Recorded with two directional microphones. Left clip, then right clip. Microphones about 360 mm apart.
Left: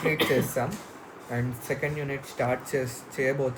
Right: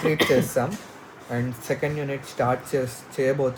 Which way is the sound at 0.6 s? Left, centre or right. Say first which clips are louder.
Right 5 dB; centre.